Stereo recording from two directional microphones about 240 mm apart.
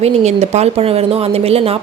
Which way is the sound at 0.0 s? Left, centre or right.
Right.